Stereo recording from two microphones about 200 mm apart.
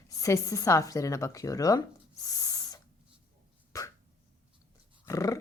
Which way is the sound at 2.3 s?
15° left (ahead or behind).